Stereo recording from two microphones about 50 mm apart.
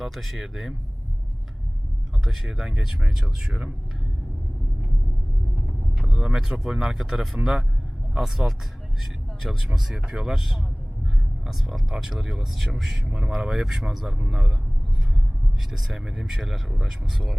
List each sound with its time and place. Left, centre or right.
0.0 s speech: centre
2.2 s speech: centre
5.6 s speech: centre
9.6 s speech: centre
15.7 s speech: centre